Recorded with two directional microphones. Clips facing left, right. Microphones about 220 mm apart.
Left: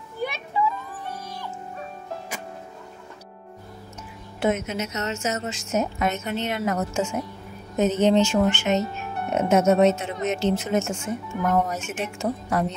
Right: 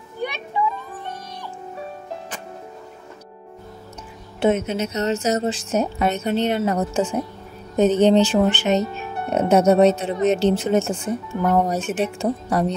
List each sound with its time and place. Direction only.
4.4 s speech: 30° right (ahead or behind)